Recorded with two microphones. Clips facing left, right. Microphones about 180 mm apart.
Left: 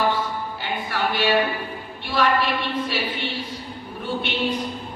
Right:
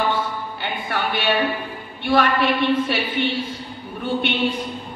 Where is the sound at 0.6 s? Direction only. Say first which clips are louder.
Right 1 dB; 55° right (ahead or behind).